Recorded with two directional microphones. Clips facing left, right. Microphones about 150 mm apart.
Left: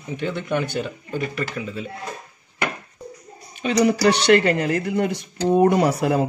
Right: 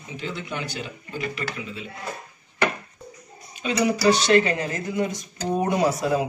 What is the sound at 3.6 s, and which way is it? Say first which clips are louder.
Speech: left 3 dB; 65° left (ahead or behind).